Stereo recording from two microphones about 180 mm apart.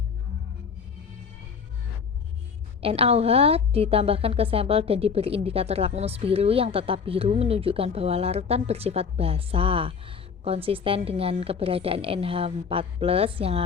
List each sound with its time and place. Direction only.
2.8 s a woman's voice: 35° right (ahead or behind)